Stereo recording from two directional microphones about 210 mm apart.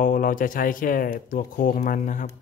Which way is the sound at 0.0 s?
40° left (ahead or behind).